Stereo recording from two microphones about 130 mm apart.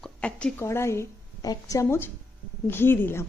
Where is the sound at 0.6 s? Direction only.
20° left (ahead or behind).